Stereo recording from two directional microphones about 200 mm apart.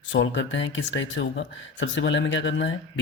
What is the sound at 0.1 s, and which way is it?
Speech, 70° left (ahead or behind).